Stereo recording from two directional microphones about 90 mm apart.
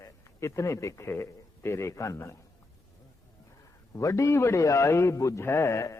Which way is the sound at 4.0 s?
35° left (ahead or behind).